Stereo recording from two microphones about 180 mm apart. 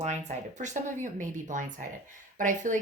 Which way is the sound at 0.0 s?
40° right (ahead or behind).